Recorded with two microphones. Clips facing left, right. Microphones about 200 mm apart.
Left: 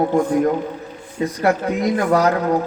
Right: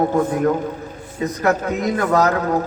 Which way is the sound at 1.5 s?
15° left (ahead or behind).